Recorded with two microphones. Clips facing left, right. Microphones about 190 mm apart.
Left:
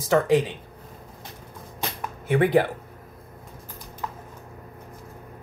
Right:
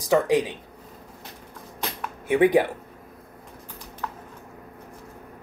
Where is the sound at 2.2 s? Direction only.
15° right (ahead or behind).